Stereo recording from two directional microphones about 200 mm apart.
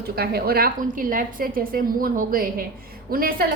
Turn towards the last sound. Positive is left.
turn(degrees=-45)  # may be behind; listen again after turning